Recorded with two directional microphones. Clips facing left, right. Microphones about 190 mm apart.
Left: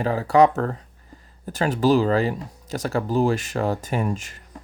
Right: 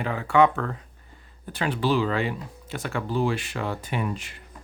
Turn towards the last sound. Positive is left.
turn(degrees=45)  # may be behind; listen again after turning